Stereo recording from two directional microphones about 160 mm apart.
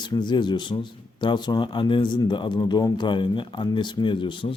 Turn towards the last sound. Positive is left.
turn(degrees=30)  # may be behind; listen again after turning